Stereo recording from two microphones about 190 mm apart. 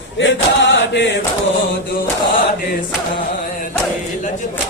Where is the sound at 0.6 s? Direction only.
65° left (ahead or behind).